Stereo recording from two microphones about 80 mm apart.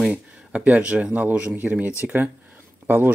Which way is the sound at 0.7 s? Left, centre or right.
Centre.